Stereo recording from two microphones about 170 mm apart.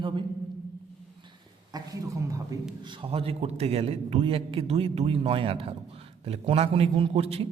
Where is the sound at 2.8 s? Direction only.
30° right (ahead or behind).